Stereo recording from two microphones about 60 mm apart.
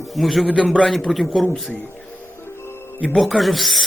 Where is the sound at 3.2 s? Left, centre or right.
Centre.